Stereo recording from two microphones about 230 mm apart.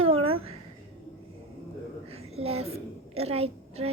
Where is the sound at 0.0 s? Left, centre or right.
Right.